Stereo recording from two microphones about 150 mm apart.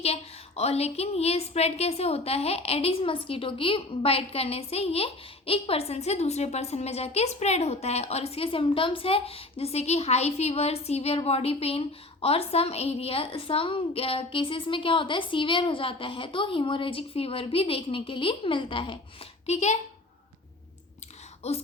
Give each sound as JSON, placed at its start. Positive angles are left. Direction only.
{"t": 0.0, "sound": "a woman's voice", "side_deg": 45}
{"t": 21.4, "sound": "speech", "side_deg": 45}